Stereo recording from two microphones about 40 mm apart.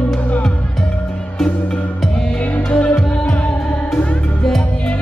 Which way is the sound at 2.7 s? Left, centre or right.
Left.